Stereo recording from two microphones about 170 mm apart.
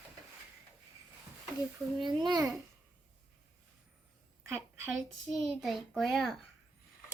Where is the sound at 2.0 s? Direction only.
25° right (ahead or behind).